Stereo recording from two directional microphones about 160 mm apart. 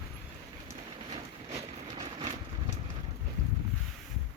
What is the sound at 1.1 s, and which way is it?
Vehicle, 35° right (ahead or behind).